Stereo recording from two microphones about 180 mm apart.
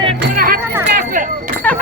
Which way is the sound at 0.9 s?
50° right (ahead or behind).